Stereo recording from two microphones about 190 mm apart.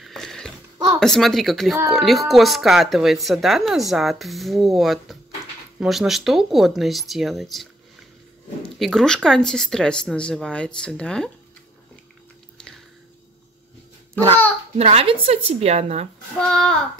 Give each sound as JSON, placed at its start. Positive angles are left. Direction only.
{"t": 0.0, "sound": "a sound", "side_deg": 0}
{"t": 0.9, "sound": "speech", "side_deg": 0}
{"t": 8.7, "sound": "speech", "side_deg": 0}
{"t": 14.8, "sound": "a woman's voice", "side_deg": -35}
{"t": 16.3, "sound": "speech", "side_deg": 0}